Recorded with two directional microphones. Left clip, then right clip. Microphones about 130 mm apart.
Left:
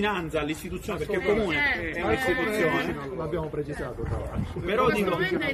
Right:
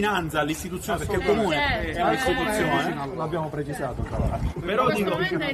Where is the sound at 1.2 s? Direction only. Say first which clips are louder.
Right 2 dB; 25° right (ahead or behind).